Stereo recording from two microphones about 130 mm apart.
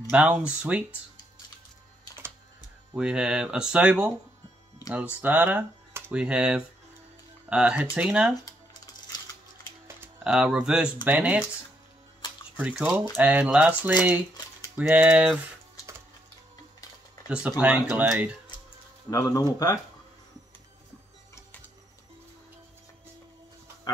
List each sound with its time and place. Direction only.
0.1 s speech: 10° right (ahead or behind)
3.0 s speech: 5° right (ahead or behind)
5.2 s speech: 15° right (ahead or behind)
9.8 s music: 20° right (ahead or behind)
10.2 s speech: 5° right (ahead or behind)
12.5 s speech: 10° right (ahead or behind)
17.3 s speech: 10° right (ahead or behind)
19.0 s speech: 25° left (ahead or behind)